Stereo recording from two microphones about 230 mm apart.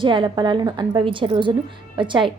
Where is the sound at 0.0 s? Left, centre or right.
Right.